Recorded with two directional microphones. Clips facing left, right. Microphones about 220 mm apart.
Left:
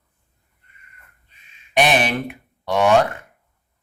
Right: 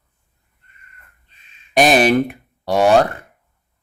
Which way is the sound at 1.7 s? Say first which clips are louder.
Right 5 dB; 40° right (ahead or behind).